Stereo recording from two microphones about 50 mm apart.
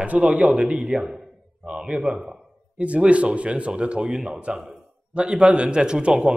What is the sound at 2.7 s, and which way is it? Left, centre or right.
Speech, right.